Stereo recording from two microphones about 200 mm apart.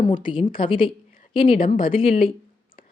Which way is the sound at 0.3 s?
25° left (ahead or behind).